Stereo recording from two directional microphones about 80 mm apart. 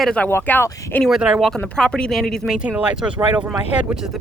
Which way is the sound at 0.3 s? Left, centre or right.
Left.